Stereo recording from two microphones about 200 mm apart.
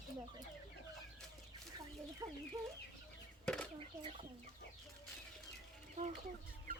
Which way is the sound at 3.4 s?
5° left (ahead or behind).